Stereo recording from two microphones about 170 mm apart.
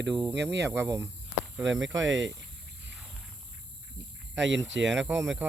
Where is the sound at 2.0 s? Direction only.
90° right.